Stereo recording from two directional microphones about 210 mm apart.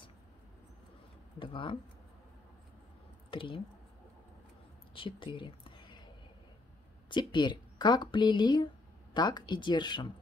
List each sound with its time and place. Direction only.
1.4 s a woman's voice: 25° left (ahead or behind)
3.3 s speech: 25° left (ahead or behind)
4.9 s a sound: 25° left (ahead or behind)
7.1 s a woman's voice: 20° left (ahead or behind)